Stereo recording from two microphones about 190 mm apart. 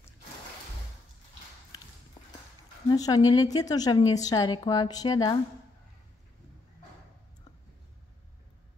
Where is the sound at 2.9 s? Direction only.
20° left (ahead or behind).